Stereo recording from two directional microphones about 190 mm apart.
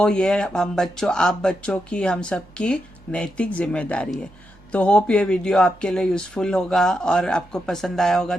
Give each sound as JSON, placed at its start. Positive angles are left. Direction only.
{"t": 0.0, "sound": "speech", "side_deg": 5}